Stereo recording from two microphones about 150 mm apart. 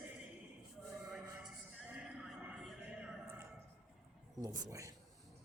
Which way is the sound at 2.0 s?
5° right (ahead or behind).